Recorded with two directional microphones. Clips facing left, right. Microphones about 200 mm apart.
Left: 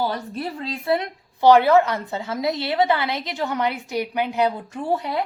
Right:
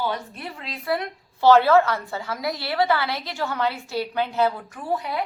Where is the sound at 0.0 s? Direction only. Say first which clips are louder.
Left 3 dB; 35° left (ahead or behind).